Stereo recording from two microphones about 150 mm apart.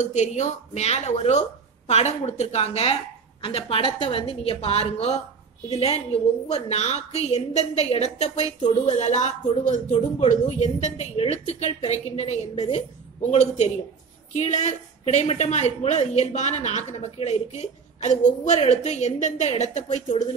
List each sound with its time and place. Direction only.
0.0 s a woman's voice: 55° left (ahead or behind)
8.6 s a woman's voice: 35° left (ahead or behind)